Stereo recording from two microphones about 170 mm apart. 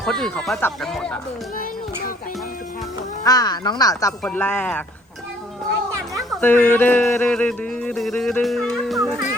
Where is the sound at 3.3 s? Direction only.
25° left (ahead or behind).